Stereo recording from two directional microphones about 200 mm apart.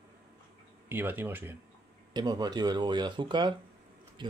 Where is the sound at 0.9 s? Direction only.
10° right (ahead or behind).